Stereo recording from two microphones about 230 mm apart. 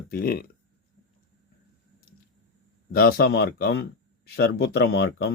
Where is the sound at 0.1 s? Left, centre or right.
Left.